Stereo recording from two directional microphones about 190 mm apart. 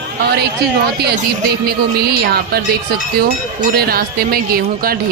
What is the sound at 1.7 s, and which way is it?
Speech, 55° right (ahead or behind).